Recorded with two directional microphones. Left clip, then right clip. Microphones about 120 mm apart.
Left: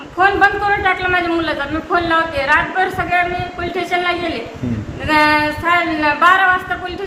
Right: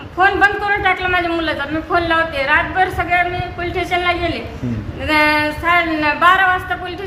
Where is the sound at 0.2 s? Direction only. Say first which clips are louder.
Left 1 dB; 25° right (ahead or behind).